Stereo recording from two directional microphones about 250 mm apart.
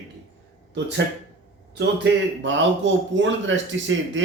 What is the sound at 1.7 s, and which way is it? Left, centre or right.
A man's voice, right.